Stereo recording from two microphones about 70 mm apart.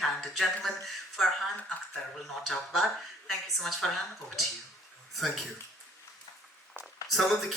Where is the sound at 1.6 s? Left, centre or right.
Centre.